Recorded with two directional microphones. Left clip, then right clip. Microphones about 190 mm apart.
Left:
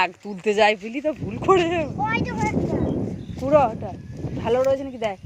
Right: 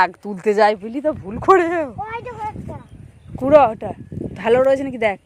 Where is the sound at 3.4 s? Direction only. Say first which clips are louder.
Right 6 dB; 35° right (ahead or behind).